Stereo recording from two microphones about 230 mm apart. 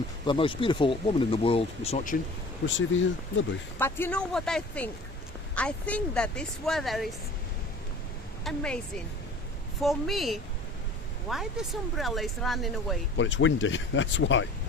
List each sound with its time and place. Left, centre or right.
0.3 s speech: left
2.6 s speech: left
3.8 s speech: centre
8.4 s speech: centre
9.8 s speech: centre
13.1 s speech: left